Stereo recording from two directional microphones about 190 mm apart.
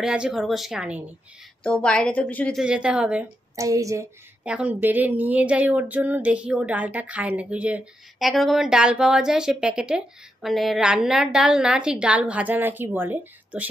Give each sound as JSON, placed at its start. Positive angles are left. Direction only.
{"t": 0.0, "sound": "a woman's voice", "side_deg": -5}
{"t": 2.6, "sound": "a woman's voice", "side_deg": -5}
{"t": 3.5, "sound": "a woman's voice", "side_deg": -15}
{"t": 4.6, "sound": "a sound", "side_deg": -10}